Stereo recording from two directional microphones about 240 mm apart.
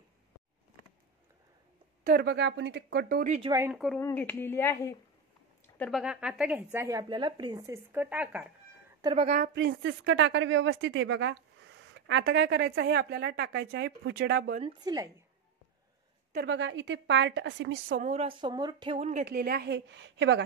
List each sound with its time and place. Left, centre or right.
2.0 s a woman's voice: right
3.3 s a woman's voice: centre
3.6 s speech: centre
5.8 s speech: centre
9.0 s a woman's voice: right
9.5 s a woman's voice: right
14.5 s a woman's voice: right
16.3 s a woman's voice: right
17.9 s a woman's voice: right
19.2 s a woman's voice: right